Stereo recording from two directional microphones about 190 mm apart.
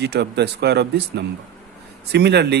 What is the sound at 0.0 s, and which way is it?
Speech, 60° right (ahead or behind).